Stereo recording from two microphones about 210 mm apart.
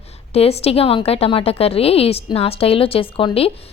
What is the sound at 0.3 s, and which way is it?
A woman's voice, 30° left (ahead or behind).